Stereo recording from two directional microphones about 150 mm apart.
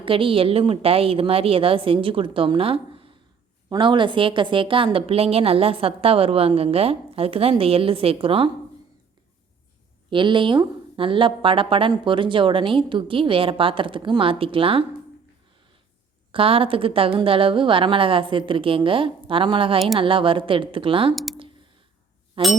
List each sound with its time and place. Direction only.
0.0 s a woman's voice: 35° right (ahead or behind)
10.1 s a woman's voice: 35° right (ahead or behind)
16.3 s a woman's voice: 40° right (ahead or behind)
22.4 s a woman's voice: 35° right (ahead or behind)